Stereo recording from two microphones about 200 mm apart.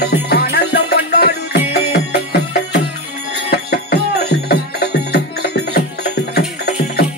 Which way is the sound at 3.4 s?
50° left (ahead or behind).